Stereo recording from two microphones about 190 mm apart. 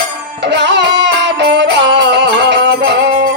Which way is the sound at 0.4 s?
65° right (ahead or behind).